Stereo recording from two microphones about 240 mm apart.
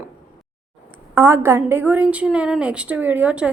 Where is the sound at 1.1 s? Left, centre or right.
Centre.